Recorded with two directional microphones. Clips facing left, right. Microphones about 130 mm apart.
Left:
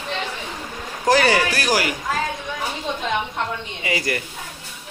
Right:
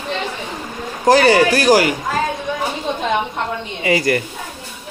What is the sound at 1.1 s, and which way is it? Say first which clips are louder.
Speech: right 6 dB; 35° right (ahead or behind).